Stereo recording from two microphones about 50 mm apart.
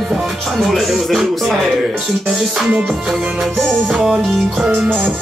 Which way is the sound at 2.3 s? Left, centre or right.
Centre.